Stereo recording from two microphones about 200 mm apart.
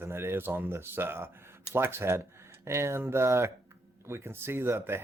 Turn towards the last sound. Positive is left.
turn(degrees=-10)  # may be behind; listen again after turning